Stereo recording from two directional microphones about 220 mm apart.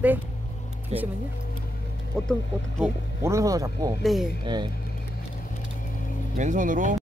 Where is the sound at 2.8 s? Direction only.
15° right (ahead or behind).